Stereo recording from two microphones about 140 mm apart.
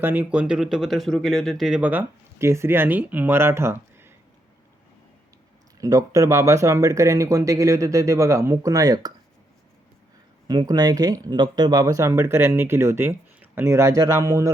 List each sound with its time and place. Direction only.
0.0 s speech: 15° right (ahead or behind)
5.8 s speech: 25° right (ahead or behind)
10.4 s speech: 30° right (ahead or behind)